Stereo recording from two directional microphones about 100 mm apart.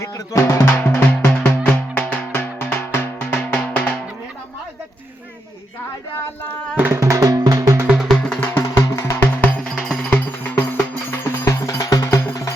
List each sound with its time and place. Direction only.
0.0 s drum: 30° left (ahead or behind)
1.2 s music: 15° left (ahead or behind)
6.7 s drum: 20° right (ahead or behind)
7.0 s music: 35° right (ahead or behind)
7.9 s music: 5° left (ahead or behind)
8.4 s music: 15° left (ahead or behind)
8.6 s music: 30° left (ahead or behind); by 10.7 s 15° left (ahead or behind)
11.2 s music: 25° left (ahead or behind)
11.8 s music: 35° left (ahead or behind)